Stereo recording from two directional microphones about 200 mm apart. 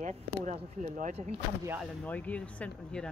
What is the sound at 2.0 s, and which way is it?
Speech, 5° left (ahead or behind).